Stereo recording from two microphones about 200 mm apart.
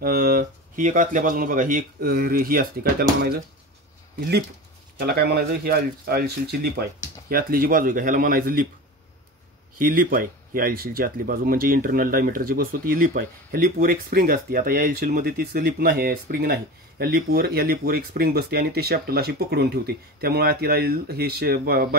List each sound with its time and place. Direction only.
0.0 s speech: 45° right (ahead or behind)
4.9 s speech: 50° right (ahead or behind)
9.8 s speech: 45° right (ahead or behind)